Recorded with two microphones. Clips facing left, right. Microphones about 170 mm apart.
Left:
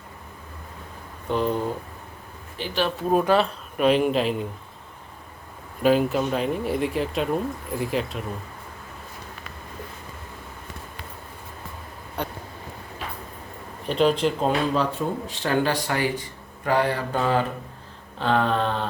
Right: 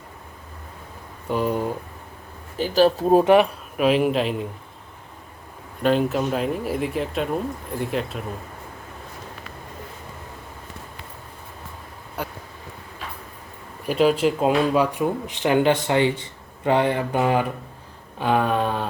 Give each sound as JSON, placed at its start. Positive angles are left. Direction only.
{"t": 1.3, "sound": "speech", "side_deg": -10}
{"t": 2.6, "sound": "speech", "side_deg": -40}
{"t": 3.8, "sound": "speech", "side_deg": -5}
{"t": 5.8, "sound": "speech", "side_deg": 5}
{"t": 12.2, "sound": "a sound", "side_deg": -5}
{"t": 13.8, "sound": "speech", "side_deg": -5}